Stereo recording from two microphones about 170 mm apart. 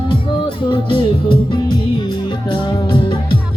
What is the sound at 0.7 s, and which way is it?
Music, 30° left (ahead or behind).